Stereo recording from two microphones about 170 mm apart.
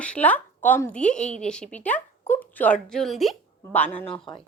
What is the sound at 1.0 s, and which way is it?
Speech, 45° left (ahead or behind).